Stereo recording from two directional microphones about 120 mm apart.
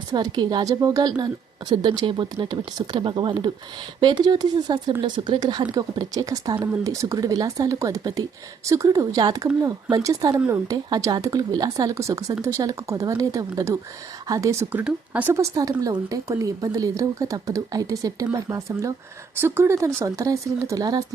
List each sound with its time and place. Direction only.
0.1 s a woman's voice: 35° right (ahead or behind)
10.8 s a woman's voice: 35° right (ahead or behind)